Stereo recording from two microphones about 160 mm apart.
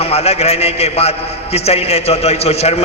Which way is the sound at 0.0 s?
40° left (ahead or behind).